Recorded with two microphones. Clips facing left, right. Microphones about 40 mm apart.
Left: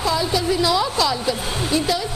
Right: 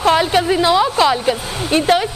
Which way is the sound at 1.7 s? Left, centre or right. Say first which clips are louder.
Right 8 dB; right.